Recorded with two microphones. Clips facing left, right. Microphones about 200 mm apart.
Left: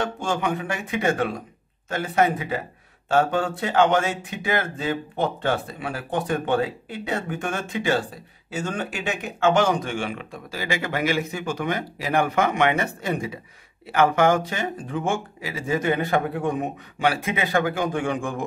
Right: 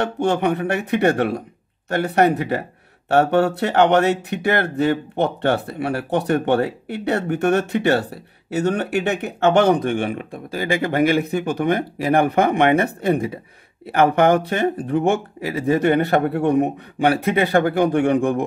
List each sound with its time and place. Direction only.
0.0 s speech: 65° right (ahead or behind)